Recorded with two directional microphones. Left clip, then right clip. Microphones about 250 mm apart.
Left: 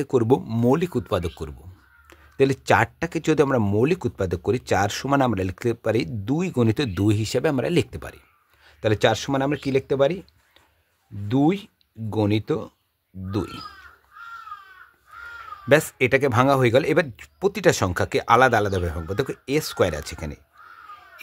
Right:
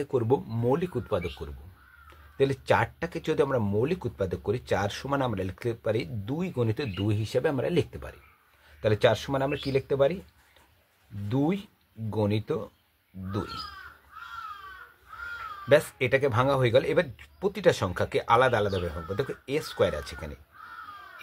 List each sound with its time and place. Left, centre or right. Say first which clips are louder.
0.0 s speech: left 6 dB; left
11.2 s speech: left 7 dB; left
15.7 s speech: left 4 dB; left